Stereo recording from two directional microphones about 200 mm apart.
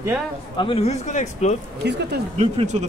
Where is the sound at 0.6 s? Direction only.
30° left (ahead or behind).